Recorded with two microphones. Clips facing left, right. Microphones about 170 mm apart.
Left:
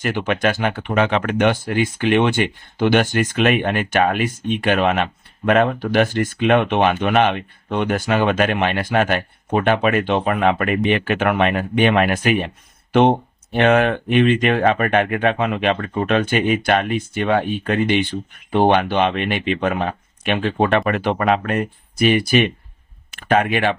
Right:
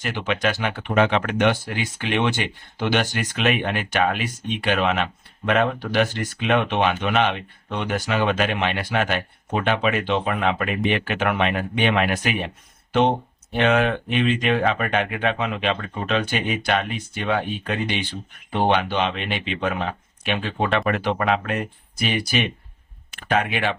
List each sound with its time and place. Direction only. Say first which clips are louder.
0.0 s speech: left 4 dB; 50° left (ahead or behind)
12.9 s speech: left 5 dB; 60° left (ahead or behind)